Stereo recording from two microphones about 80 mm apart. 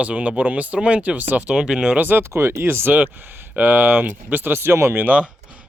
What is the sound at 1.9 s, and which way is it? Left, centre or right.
Speech, right.